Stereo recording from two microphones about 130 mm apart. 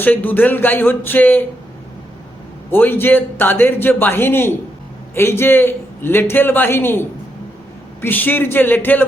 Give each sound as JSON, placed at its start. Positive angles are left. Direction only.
{"t": 0.0, "sound": "a man's voice", "side_deg": 15}
{"t": 2.6, "sound": "a man's voice", "side_deg": 15}